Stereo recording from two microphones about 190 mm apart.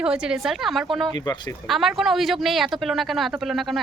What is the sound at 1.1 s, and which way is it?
Speech, 20° left (ahead or behind).